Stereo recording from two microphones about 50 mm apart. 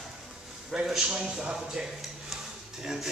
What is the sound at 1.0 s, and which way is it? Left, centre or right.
Speech, centre.